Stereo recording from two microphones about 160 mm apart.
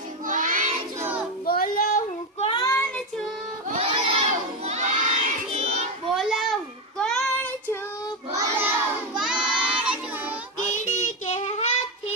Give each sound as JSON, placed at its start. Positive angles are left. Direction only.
{"t": 0.3, "sound": "child singing", "side_deg": -55}
{"t": 1.0, "sound": "child singing", "side_deg": -10}
{"t": 1.5, "sound": "child singing", "side_deg": 65}
{"t": 2.4, "sound": "child singing", "side_deg": 30}
{"t": 2.6, "sound": "child singing", "side_deg": 15}
{"t": 3.7, "sound": "crowd", "side_deg": -40}
{"t": 6.1, "sound": "a sound", "side_deg": 0}
{"t": 7.0, "sound": "child singing", "side_deg": 5}
{"t": 8.3, "sound": "child singing", "side_deg": -20}
{"t": 9.1, "sound": "child singing", "side_deg": -5}
{"t": 10.6, "sound": "child singing", "side_deg": 50}